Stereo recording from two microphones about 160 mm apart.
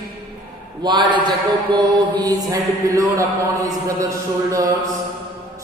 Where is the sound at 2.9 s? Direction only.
20° right (ahead or behind).